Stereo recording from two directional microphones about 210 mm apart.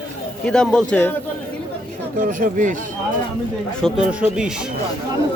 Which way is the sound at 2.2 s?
40° right (ahead or behind).